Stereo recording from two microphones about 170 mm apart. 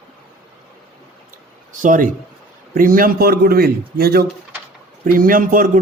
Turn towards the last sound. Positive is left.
turn(degrees=-50)  # may be behind; listen again after turning